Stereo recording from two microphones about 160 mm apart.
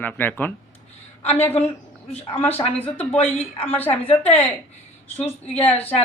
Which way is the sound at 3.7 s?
10° left (ahead or behind).